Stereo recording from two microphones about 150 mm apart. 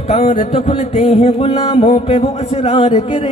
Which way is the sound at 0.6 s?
45° left (ahead or behind).